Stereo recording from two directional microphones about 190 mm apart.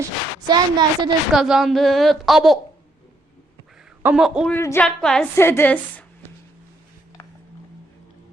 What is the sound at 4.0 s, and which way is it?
Speech, 5° right (ahead or behind).